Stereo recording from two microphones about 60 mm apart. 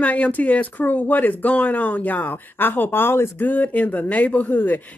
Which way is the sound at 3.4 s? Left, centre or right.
Left.